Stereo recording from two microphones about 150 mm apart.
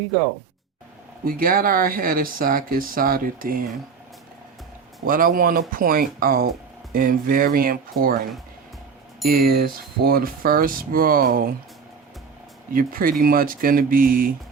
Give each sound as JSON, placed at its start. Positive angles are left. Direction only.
{"t": 1.2, "sound": "speech", "side_deg": -75}
{"t": 5.0, "sound": "speech", "side_deg": -70}
{"t": 12.7, "sound": "speech", "side_deg": -70}